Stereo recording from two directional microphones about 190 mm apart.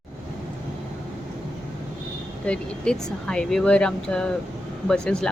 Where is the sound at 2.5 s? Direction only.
5° left (ahead or behind).